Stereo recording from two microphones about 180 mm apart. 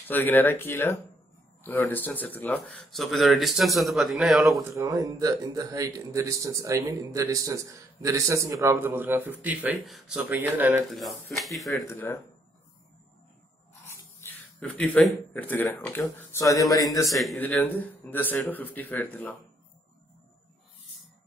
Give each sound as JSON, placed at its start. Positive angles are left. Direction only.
{"t": 0.0, "sound": "speech", "side_deg": 10}
{"t": 4.6, "sound": "speech", "side_deg": -20}
{"t": 11.3, "sound": "speech", "side_deg": 0}
{"t": 11.9, "sound": "speech", "side_deg": 15}
{"t": 14.2, "sound": "speech", "side_deg": 10}
{"t": 17.1, "sound": "speech", "side_deg": 0}